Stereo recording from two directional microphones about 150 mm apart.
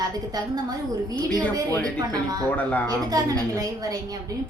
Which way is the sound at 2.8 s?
25° right (ahead or behind).